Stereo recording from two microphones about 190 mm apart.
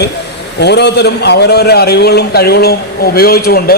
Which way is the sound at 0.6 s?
60° left (ahead or behind).